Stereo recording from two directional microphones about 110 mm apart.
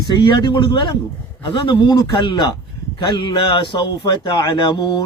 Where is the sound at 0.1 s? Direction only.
45° left (ahead or behind).